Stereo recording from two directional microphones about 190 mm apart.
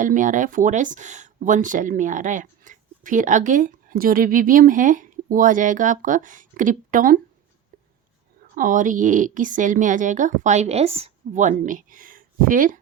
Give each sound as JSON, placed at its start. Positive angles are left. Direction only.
{"t": 0.0, "sound": "speech", "side_deg": -40}
{"t": 8.5, "sound": "speech", "side_deg": -45}